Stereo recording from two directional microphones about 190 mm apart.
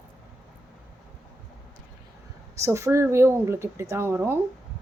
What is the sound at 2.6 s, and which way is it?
A woman's voice, 15° right (ahead or behind).